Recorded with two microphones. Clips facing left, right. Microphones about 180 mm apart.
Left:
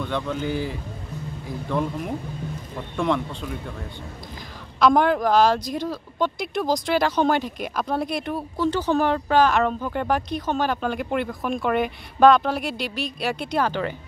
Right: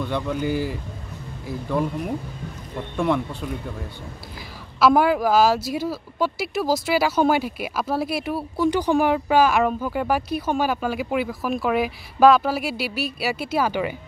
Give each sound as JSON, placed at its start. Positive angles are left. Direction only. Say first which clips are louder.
{"t": 0.0, "sound": "speech", "louder": "right 2 dB", "side_deg": -10}
{"t": 4.7, "sound": "speech", "louder": "right 1 dB", "side_deg": -5}